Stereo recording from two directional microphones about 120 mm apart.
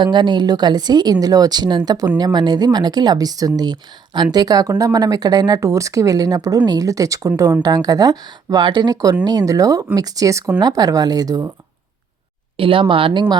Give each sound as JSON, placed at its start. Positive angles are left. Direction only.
{"t": 0.0, "sound": "speech", "side_deg": -40}
{"t": 12.5, "sound": "speech", "side_deg": -45}